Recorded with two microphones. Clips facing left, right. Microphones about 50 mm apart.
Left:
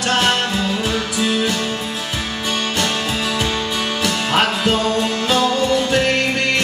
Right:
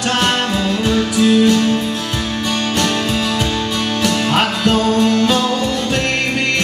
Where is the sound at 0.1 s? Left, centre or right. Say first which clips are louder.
Even; centre.